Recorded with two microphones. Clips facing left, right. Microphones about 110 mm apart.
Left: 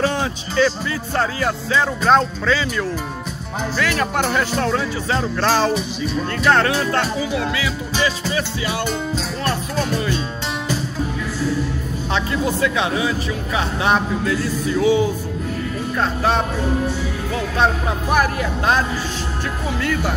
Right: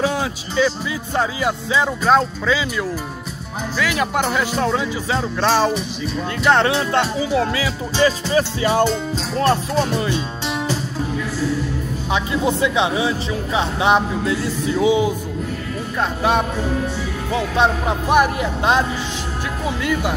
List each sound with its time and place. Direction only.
0.0 s speech: 10° right (ahead or behind)
6.4 s speech: 20° right (ahead or behind)
7.3 s speech: 35° right (ahead or behind)
9.4 s speech: 25° right (ahead or behind)
12.1 s speech: 20° right (ahead or behind)